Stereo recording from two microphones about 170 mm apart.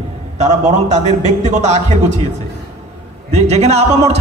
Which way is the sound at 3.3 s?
40° right (ahead or behind).